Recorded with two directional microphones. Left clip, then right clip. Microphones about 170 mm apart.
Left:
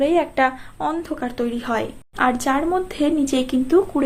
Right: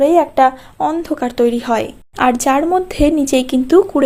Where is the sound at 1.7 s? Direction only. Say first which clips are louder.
Right 6 dB; 40° right (ahead or behind).